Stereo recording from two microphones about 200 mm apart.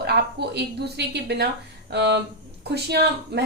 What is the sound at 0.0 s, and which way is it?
A woman's voice, 55° right (ahead or behind).